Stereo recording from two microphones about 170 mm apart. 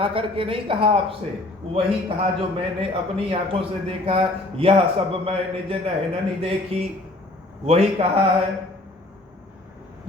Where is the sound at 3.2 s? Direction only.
35° right (ahead or behind).